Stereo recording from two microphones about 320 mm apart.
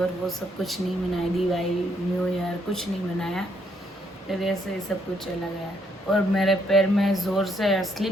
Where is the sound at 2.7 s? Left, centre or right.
Centre.